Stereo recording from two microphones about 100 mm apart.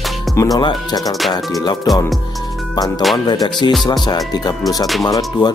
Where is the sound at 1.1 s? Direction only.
Centre (ahead or behind).